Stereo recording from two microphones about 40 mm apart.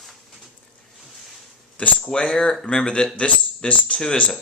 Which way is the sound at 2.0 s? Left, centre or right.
Left.